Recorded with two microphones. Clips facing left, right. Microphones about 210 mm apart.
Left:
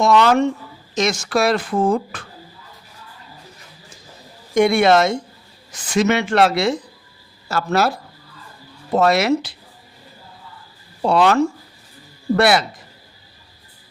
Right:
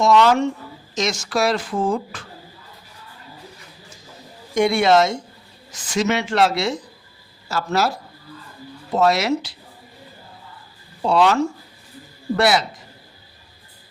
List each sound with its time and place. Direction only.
0.0 s speech: 60° left (ahead or behind)
4.5 s speech: 55° left (ahead or behind)
9.0 s speech: 55° left (ahead or behind)
11.0 s speech: 55° left (ahead or behind)
12.4 s speech: 60° left (ahead or behind)